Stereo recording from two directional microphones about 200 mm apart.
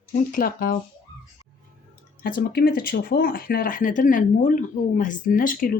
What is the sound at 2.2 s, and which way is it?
Speech, 50° left (ahead or behind).